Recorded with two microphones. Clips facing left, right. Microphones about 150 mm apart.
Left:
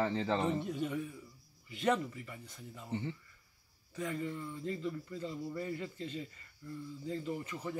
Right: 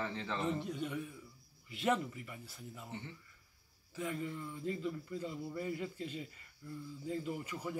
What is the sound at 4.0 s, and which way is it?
A man's voice, 5° right (ahead or behind).